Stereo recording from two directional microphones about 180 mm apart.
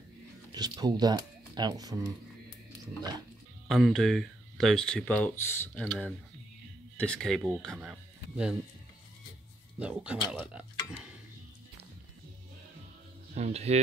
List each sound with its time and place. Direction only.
0.5 s speech: 20° right (ahead or behind)
3.6 s speech: centre (ahead or behind)
9.8 s speech: 5° right (ahead or behind)
13.3 s speech: 35° right (ahead or behind)